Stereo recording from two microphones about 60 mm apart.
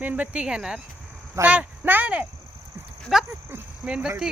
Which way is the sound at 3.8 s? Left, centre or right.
Centre.